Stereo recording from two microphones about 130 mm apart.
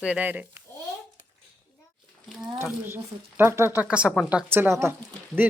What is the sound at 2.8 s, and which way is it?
Speech, 15° right (ahead or behind).